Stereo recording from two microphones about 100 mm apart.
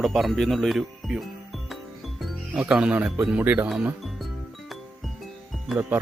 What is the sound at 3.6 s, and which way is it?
Speech, 5° right (ahead or behind).